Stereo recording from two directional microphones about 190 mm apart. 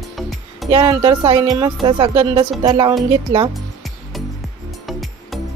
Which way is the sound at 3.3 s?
75° right (ahead or behind).